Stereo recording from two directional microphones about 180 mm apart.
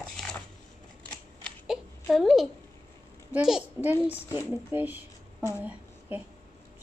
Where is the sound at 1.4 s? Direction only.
Centre (ahead or behind).